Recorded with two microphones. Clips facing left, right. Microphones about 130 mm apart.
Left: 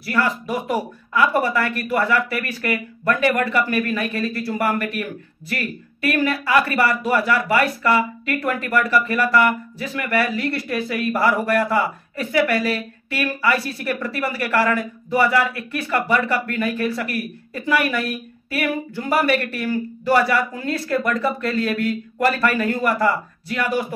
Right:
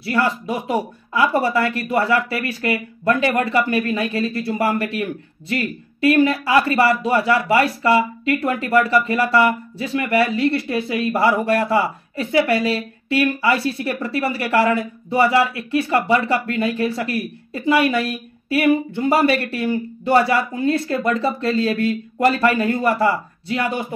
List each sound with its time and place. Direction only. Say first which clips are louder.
0.0 s speech: right 2 dB; 25° right (ahead or behind)